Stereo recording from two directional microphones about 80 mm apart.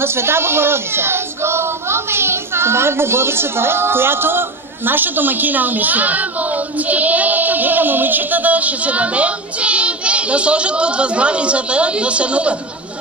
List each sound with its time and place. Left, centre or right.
0.0 s speech: right; by 12.5 s centre